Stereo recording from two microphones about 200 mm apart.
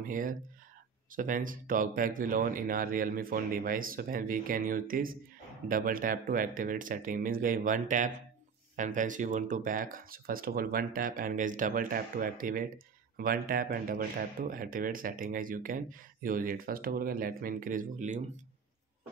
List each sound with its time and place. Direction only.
0.0 s speech: 40° right (ahead or behind)